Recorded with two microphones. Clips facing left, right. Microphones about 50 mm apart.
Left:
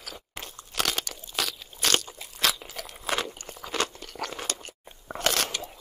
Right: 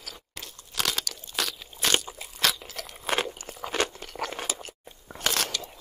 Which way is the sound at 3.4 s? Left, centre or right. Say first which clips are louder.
Right 3 dB; centre.